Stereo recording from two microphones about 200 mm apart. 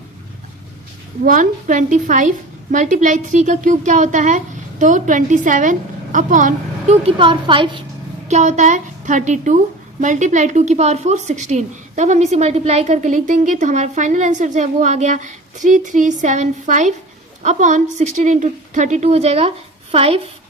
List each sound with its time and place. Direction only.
1.2 s a woman's voice: 40° right (ahead or behind); by 7.8 s 25° right (ahead or behind)
8.3 s a woman's voice: 35° right (ahead or behind)